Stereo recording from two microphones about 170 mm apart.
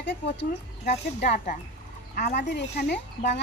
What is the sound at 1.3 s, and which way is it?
Speech, 45° left (ahead or behind).